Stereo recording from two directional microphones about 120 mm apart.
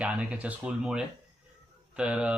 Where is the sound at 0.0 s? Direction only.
10° right (ahead or behind).